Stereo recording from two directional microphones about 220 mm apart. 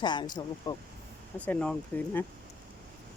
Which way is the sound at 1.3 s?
5° left (ahead or behind).